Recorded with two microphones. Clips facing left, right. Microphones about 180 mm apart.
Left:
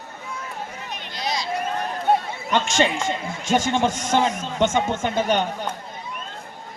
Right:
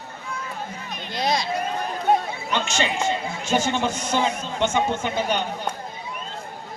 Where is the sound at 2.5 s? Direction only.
45° left (ahead or behind).